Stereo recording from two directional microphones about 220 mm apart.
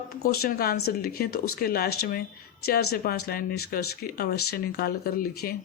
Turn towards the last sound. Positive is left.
turn(degrees=45)  # may be behind; listen again after turning